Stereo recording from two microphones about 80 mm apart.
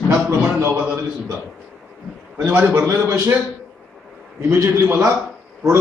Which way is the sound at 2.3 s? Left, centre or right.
Right.